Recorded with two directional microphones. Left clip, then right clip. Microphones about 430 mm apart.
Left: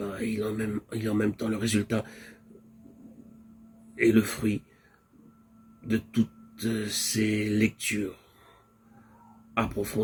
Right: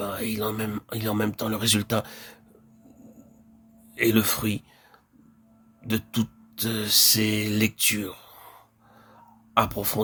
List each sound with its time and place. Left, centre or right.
0.0 s a sound: right
0.3 s speech: right
4.0 s speech: right
5.9 s speech: right
9.6 s speech: right